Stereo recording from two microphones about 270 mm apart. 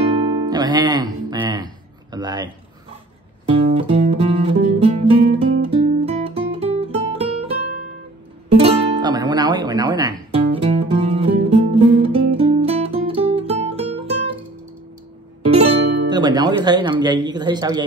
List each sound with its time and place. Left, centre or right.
0.1 s music: centre
3.7 s music: right
5.8 s guitar: right
6.5 s music: right
15.4 s music: right